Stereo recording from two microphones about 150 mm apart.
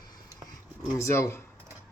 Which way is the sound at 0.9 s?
20° left (ahead or behind).